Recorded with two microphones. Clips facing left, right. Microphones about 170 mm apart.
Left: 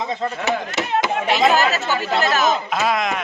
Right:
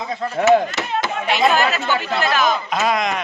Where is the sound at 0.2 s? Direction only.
25° left (ahead or behind).